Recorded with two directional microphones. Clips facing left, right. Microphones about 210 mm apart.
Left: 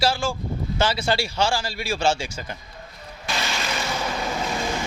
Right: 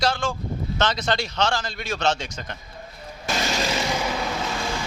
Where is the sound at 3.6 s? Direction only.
20° right (ahead or behind).